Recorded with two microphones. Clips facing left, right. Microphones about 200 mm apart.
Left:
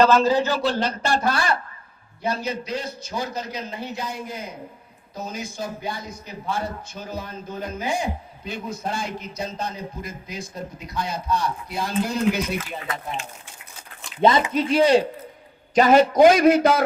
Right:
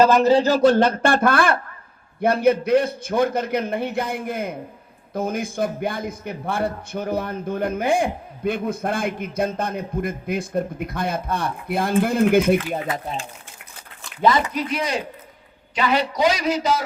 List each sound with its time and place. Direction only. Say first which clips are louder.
0.0 s speech: right 1 dB; 15° right (ahead or behind)
0.3 s speech: right 4 dB; 30° right (ahead or behind)
0.5 s a man's voice: right 8 dB; 50° right (ahead or behind)
12.7 s speech: right 5 dB; 40° right (ahead or behind)
14.2 s speech: left 1 dB; 25° left (ahead or behind)
15.7 s a man's voice: left 6 dB; 45° left (ahead or behind)